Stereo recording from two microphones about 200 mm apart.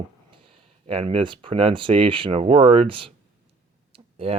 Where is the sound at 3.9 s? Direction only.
30° right (ahead or behind).